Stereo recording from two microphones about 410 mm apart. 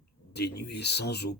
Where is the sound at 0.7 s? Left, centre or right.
Left.